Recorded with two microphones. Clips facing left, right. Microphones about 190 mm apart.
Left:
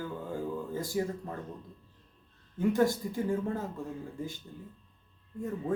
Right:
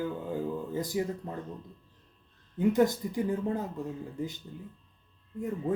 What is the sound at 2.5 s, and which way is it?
Speech, 20° right (ahead or behind).